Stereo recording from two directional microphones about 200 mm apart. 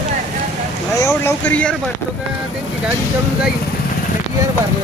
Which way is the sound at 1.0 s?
10° left (ahead or behind).